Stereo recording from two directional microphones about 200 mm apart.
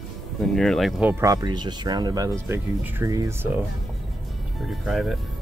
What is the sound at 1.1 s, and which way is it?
Speech, 15° right (ahead or behind).